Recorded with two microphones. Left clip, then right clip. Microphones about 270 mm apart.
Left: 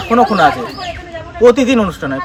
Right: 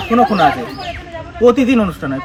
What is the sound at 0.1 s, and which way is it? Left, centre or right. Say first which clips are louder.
Speech: left 2 dB; centre.